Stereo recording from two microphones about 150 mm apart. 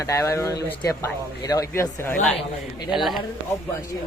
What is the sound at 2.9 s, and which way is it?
Speech, centre (ahead or behind).